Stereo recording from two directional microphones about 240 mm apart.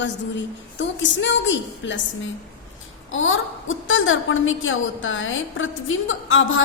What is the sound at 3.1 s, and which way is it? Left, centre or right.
A woman's voice, left.